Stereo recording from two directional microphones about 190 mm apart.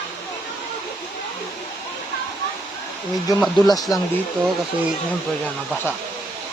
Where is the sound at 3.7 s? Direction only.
20° left (ahead or behind).